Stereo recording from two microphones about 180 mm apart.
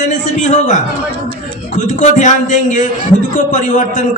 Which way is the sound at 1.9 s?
45° left (ahead or behind).